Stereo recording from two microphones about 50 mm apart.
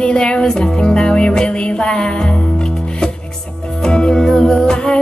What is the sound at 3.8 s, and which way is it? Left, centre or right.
Music, centre.